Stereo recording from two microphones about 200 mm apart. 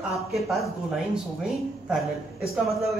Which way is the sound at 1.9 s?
Centre (ahead or behind).